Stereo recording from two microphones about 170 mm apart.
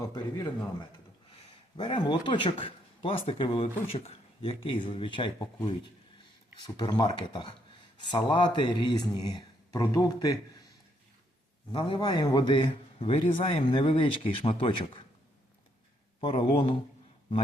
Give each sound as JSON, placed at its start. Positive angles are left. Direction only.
{"t": 0.0, "sound": "speech", "side_deg": 25}
{"t": 11.7, "sound": "speech", "side_deg": 30}
{"t": 16.2, "sound": "speech", "side_deg": 30}